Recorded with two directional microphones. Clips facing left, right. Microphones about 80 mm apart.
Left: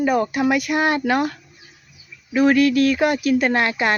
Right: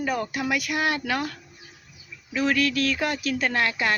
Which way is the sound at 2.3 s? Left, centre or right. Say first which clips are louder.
Left 8 dB; left.